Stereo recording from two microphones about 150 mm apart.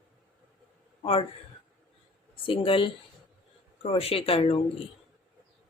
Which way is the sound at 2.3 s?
35° left (ahead or behind).